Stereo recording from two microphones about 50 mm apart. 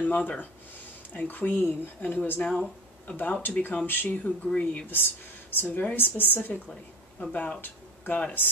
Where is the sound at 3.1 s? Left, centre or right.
Left.